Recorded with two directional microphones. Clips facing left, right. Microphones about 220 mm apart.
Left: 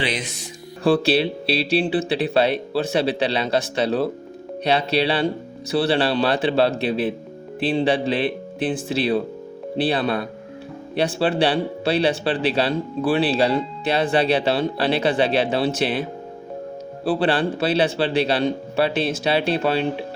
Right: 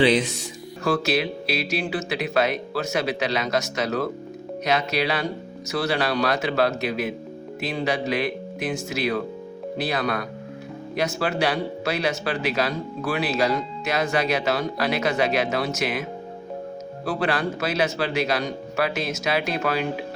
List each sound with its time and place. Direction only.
0.9 s speech: 30° left (ahead or behind)
17.1 s speech: 30° left (ahead or behind)